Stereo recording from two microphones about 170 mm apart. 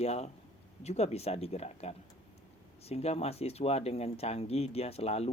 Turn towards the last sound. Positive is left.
turn(degrees=35)  # may be behind; listen again after turning